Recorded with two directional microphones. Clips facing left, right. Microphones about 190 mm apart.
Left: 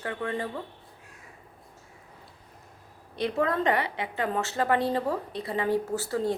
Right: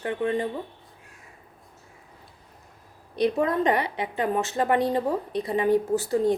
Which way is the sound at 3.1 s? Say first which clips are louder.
Right 4 dB; 20° right (ahead or behind).